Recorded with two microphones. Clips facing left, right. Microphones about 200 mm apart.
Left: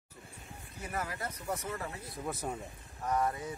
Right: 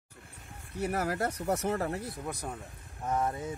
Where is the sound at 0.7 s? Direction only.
70° right (ahead or behind).